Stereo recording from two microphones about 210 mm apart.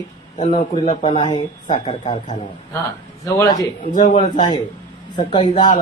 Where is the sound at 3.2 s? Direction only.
15° left (ahead or behind).